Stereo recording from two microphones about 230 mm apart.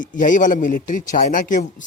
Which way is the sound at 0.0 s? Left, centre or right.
Left.